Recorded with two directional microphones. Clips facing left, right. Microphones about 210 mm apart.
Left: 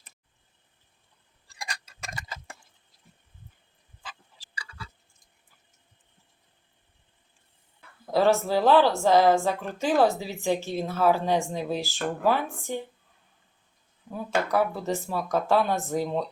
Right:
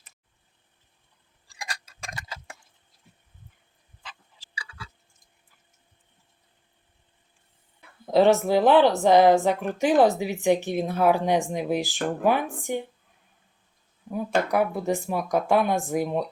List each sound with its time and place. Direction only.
1.5 s tick-tock: centre (ahead or behind)
4.5 s a sound: 5° right (ahead or behind)
7.8 s speech: 20° right (ahead or behind)
14.1 s speech: 15° right (ahead or behind)